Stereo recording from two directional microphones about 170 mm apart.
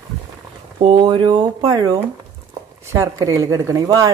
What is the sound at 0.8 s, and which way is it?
Speech, 30° right (ahead or behind).